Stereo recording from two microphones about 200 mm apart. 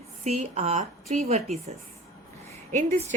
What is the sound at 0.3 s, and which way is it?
A woman's voice, 35° right (ahead or behind).